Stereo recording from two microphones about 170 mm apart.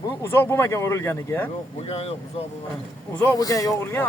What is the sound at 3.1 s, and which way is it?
Speech, 10° left (ahead or behind).